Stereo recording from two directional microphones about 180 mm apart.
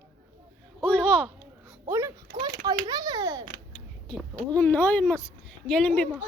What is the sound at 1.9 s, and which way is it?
A child's voice, 15° right (ahead or behind).